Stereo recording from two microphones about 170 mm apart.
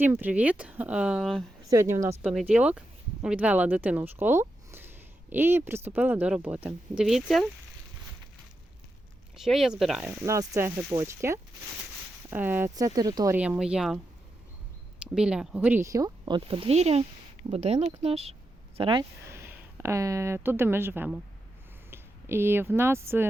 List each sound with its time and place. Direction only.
0.0 s speech: 10° right (ahead or behind)
1.7 s speech: 20° right (ahead or behind); by 7.4 s centre (ahead or behind)
9.3 s speech: centre (ahead or behind); by 13.3 s 20° right (ahead or behind)
13.3 s speech: 10° right (ahead or behind)
15.0 s speech: 5° right (ahead or behind); by 19.0 s 30° right (ahead or behind)
19.2 s speech: 15° right (ahead or behind)